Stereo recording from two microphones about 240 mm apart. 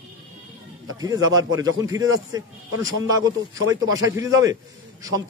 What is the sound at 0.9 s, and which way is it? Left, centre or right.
A man's voice, centre.